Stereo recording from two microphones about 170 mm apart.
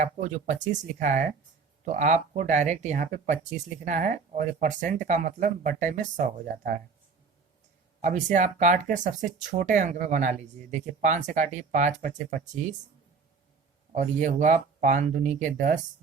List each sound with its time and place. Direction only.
0.0 s speech: 45° right (ahead or behind)
8.0 s speech: 45° right (ahead or behind)
13.9 s speech: 45° right (ahead or behind)